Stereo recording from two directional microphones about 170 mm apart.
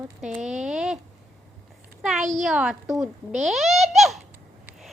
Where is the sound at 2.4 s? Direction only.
5° right (ahead or behind).